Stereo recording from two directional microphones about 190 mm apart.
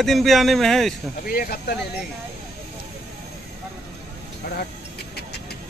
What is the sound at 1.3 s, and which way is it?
Speech, 50° left (ahead or behind).